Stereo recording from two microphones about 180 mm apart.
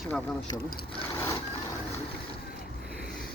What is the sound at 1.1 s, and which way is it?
Vehicle, 15° left (ahead or behind).